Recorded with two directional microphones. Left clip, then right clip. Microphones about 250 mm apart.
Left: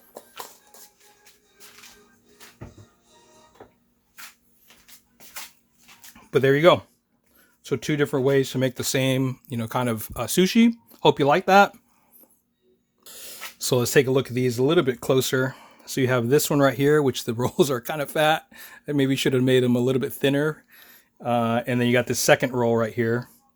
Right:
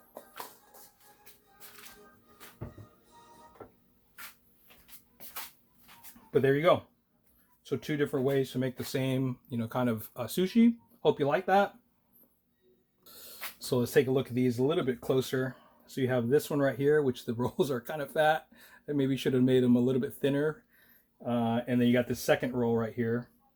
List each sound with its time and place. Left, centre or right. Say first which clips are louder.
6.3 s speech: left 8 dB; left
13.1 s speech: left 6 dB; left